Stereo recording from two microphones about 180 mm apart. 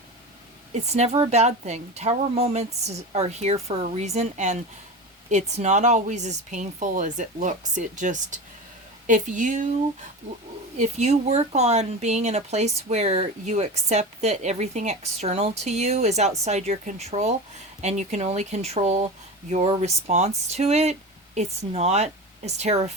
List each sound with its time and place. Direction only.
0.7 s a woman's voice: 40° right (ahead or behind)
10.8 s speech: 40° right (ahead or behind)